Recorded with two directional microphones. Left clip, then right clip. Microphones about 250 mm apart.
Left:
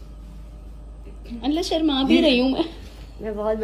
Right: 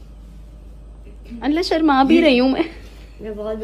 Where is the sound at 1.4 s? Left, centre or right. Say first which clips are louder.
Right 4 dB; centre.